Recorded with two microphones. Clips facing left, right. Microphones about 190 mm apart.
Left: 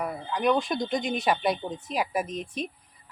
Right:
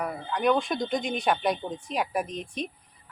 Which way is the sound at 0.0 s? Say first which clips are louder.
Even; centre (ahead or behind).